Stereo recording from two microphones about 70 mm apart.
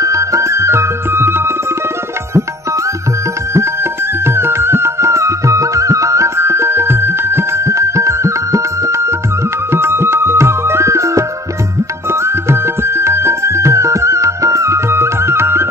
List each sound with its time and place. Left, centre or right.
0.0 s music: right
4.3 s music: right
9.7 s music: right